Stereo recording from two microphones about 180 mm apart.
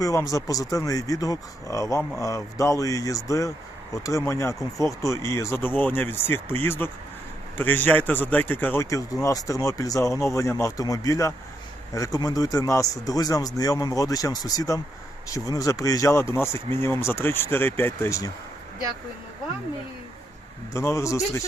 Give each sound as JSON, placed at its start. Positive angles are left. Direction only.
{"t": 0.0, "sound": "speech", "side_deg": 20}
{"t": 20.7, "sound": "speech", "side_deg": 15}